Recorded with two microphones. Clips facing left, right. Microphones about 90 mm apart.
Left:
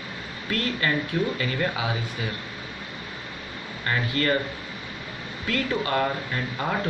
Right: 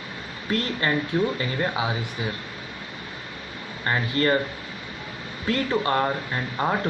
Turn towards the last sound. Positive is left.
turn(degrees=-30)  # may be behind; listen again after turning